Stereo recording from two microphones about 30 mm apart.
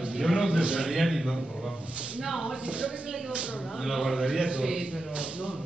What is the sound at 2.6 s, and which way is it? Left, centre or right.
Speech, right.